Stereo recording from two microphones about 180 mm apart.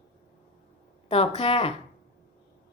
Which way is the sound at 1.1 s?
35° left (ahead or behind).